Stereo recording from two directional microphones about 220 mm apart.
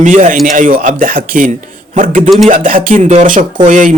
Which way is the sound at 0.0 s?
35° right (ahead or behind).